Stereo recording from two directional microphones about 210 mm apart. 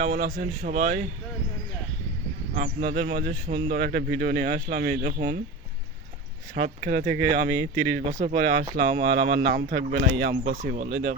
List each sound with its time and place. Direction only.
0.0 s speech: 40° right (ahead or behind)
2.6 s speech: 40° right (ahead or behind)
6.8 s speech: 45° right (ahead or behind)
8.2 s speech: 35° right (ahead or behind)